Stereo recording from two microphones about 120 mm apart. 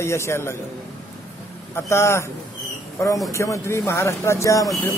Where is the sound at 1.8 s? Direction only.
20° left (ahead or behind).